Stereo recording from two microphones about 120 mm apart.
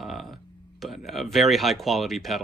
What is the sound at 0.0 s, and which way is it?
Speech, centre (ahead or behind).